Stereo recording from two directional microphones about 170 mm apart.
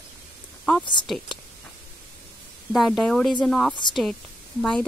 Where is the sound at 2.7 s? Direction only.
Centre (ahead or behind).